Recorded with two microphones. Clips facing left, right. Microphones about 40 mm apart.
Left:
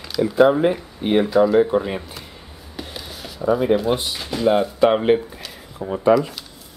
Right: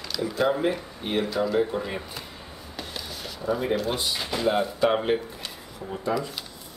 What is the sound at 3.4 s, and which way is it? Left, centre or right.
Speech, centre.